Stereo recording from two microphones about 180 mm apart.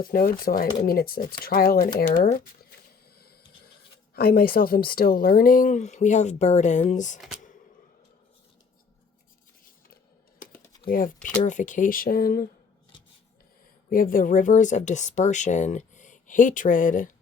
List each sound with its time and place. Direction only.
0.0 s speech: 55° left (ahead or behind)
4.1 s speech: 60° left (ahead or behind)
10.8 s speech: 50° left (ahead or behind)
13.9 s speech: 50° left (ahead or behind)